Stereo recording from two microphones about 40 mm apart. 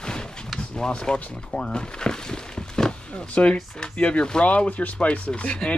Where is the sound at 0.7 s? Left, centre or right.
Centre.